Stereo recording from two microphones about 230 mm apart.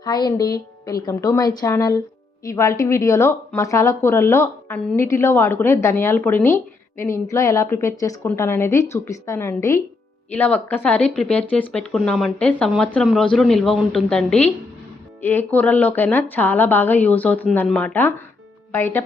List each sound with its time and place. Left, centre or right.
0.0 s speech: centre